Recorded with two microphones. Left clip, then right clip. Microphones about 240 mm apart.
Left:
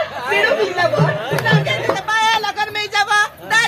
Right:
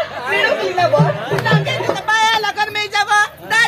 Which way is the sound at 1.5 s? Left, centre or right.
Centre.